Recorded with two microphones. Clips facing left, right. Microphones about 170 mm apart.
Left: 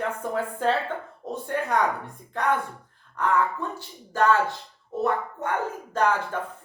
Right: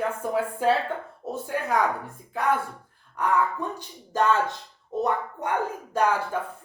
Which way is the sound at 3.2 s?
15° right (ahead or behind).